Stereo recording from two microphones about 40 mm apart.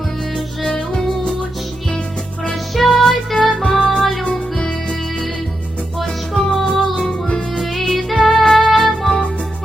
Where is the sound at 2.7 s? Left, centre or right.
Centre.